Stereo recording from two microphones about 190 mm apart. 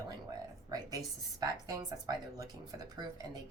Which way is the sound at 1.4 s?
20° right (ahead or behind).